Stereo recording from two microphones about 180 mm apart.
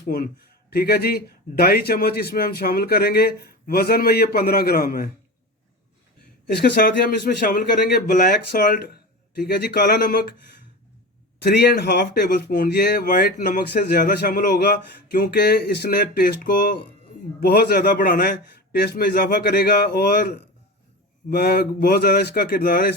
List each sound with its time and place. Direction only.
0.0 s speech: 55° left (ahead or behind)
6.6 s speech: 60° left (ahead or behind)
11.5 s speech: 70° left (ahead or behind)